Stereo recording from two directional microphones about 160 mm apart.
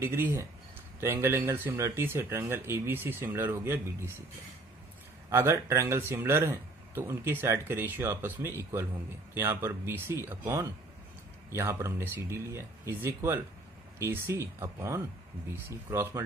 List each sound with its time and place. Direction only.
0.0 s speech: 15° right (ahead or behind)
5.3 s speech: 15° right (ahead or behind)